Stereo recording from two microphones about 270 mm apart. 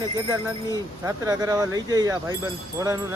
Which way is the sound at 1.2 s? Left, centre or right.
Centre.